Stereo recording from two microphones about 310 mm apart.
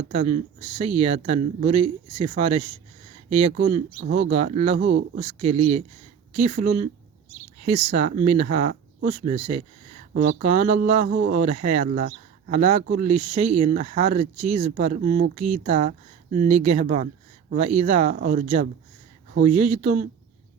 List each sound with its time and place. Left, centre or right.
0.1 s speech: centre